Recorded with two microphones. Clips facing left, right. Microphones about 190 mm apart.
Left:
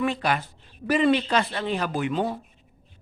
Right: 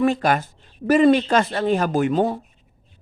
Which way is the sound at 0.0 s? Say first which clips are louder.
Right 6 dB; 45° right (ahead or behind).